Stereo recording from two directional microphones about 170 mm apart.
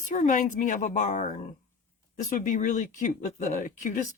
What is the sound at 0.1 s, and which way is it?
Speech, 45° left (ahead or behind).